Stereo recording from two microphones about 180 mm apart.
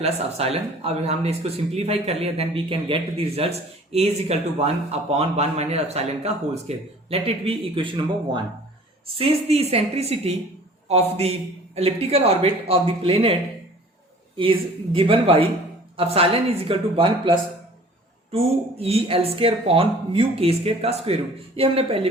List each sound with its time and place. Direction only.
0.0 s a man's voice: 35° right (ahead or behind)
14.9 s speech: 30° right (ahead or behind)